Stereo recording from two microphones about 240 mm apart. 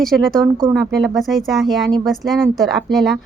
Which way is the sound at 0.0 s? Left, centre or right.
Centre.